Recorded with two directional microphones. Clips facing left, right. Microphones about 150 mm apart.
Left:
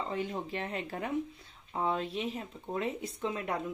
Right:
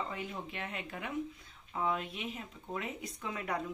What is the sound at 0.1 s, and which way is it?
Speech, 35° left (ahead or behind).